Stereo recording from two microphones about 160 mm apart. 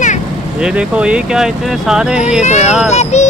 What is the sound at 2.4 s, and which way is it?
Music, 45° left (ahead or behind).